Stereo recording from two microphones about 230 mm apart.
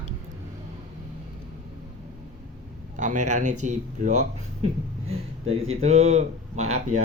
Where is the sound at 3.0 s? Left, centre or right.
Right.